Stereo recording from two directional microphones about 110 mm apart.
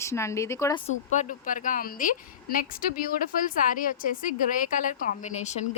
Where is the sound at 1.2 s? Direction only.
90° left.